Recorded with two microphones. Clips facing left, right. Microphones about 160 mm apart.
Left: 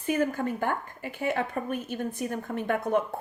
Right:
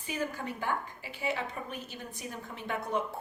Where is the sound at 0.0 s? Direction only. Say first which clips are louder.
Left 9 dB; 55° left (ahead or behind).